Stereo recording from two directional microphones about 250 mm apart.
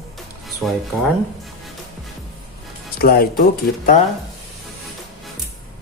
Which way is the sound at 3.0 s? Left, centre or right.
Left.